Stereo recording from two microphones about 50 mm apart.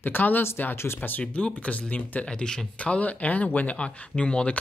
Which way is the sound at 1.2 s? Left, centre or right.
Left.